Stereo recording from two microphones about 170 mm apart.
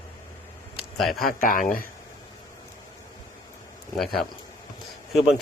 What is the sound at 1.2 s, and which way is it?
Speech, 50° left (ahead or behind).